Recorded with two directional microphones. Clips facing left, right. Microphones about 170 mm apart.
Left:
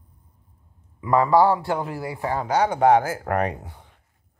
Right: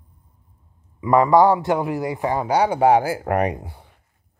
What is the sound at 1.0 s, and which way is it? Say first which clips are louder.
A man's voice: right 3 dB; 20° right (ahead or behind).